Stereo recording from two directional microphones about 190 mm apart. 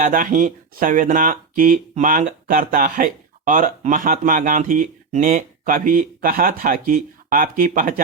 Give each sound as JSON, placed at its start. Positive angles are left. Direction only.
{"t": 0.0, "sound": "speech", "side_deg": -45}